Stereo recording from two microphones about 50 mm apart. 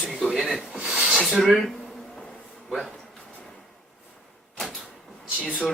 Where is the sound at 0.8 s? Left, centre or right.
Right.